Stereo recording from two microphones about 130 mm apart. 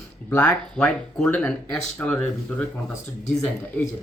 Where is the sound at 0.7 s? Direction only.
5° left (ahead or behind).